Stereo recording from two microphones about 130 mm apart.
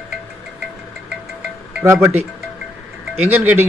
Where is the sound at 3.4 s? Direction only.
15° right (ahead or behind).